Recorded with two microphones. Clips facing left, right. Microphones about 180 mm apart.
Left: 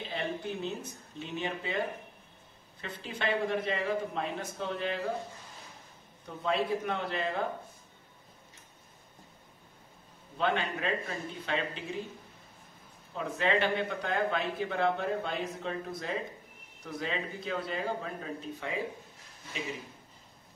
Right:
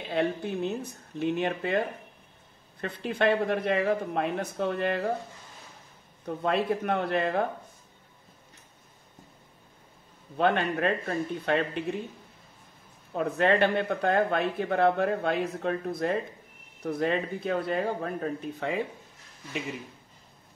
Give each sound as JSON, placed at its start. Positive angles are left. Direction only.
{"t": 0.1, "sound": "speech", "side_deg": -55}
{"t": 2.8, "sound": "speech", "side_deg": -60}
{"t": 6.2, "sound": "speech", "side_deg": -60}
{"t": 10.3, "sound": "speech", "side_deg": -60}
{"t": 13.1, "sound": "speech", "side_deg": -55}